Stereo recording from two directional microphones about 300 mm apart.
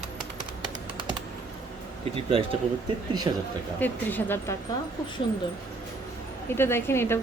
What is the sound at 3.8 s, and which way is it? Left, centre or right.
Speech, centre.